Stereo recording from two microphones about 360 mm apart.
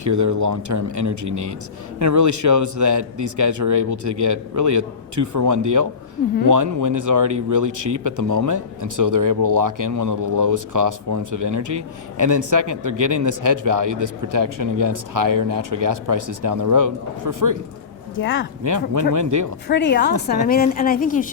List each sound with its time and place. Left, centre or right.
0.0 s a man's voice: right
18.2 s speech: left
18.6 s a man's voice: right
19.6 s a woman's voice: left